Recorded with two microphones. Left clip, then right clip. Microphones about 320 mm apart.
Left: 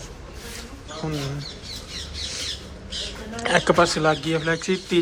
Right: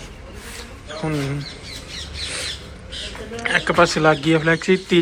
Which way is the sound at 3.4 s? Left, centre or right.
Centre.